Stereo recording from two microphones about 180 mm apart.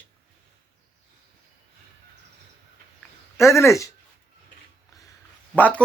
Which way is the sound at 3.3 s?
15° left (ahead or behind).